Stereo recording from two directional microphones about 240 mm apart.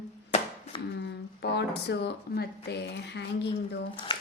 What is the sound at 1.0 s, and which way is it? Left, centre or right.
Speech, left.